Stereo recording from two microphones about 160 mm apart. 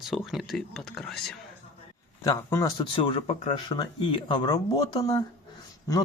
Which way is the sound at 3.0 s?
30° left (ahead or behind).